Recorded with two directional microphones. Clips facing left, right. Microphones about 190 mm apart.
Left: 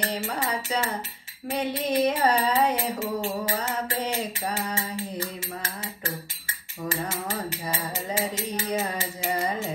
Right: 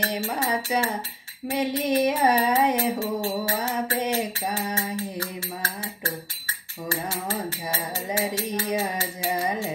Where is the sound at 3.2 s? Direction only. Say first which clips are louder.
Right 2 dB; 15° left (ahead or behind).